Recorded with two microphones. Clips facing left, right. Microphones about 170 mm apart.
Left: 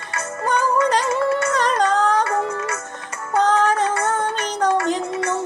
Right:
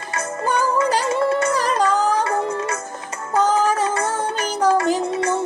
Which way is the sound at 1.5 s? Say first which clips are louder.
Even; 5° right (ahead or behind).